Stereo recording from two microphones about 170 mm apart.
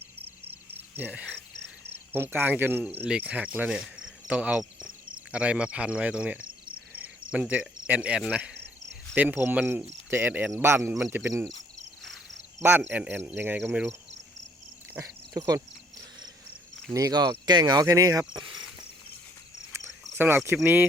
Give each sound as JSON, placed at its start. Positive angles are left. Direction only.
{"t": 0.7, "sound": "cricket", "side_deg": -10}
{"t": 2.1, "sound": "speech", "side_deg": -15}
{"t": 6.9, "sound": "cricket", "side_deg": -5}
{"t": 9.1, "sound": "speech", "side_deg": -10}
{"t": 10.9, "sound": "speech", "side_deg": 0}
{"t": 11.2, "sound": "speech", "side_deg": -15}
{"t": 12.5, "sound": "speech", "side_deg": -15}
{"t": 14.9, "sound": "a sound", "side_deg": -20}
{"t": 16.9, "sound": "cricket", "side_deg": -20}
{"t": 20.1, "sound": "speech", "side_deg": -15}